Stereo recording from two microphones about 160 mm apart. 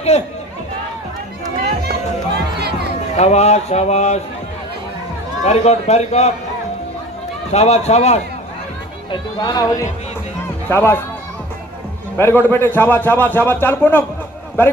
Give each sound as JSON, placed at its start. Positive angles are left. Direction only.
{"t": 0.1, "sound": "speech", "side_deg": 45}
{"t": 2.3, "sound": "music", "side_deg": -90}
{"t": 3.2, "sound": "speech", "side_deg": 45}
{"t": 5.4, "sound": "speech", "side_deg": 40}
{"t": 7.5, "sound": "speech", "side_deg": 45}
{"t": 9.1, "sound": "a man's voice", "side_deg": 25}
{"t": 12.2, "sound": "a man's voice", "side_deg": 15}